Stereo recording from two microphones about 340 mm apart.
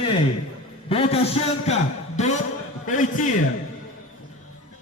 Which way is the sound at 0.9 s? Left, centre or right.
Centre.